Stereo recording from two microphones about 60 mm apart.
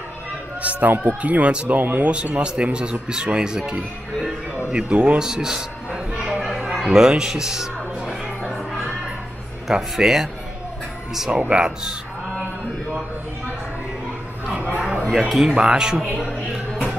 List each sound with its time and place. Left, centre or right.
0.6 s speech: right
5.2 s a sound: centre
9.7 s speech: centre
15.0 s speech: centre
15.4 s speech: centre